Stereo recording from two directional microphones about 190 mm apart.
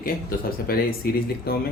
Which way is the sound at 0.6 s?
50° left (ahead or behind).